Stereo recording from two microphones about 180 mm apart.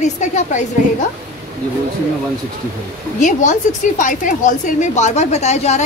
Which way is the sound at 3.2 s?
40° left (ahead or behind).